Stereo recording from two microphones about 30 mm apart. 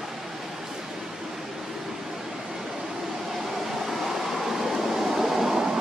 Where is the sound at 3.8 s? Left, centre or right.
Centre.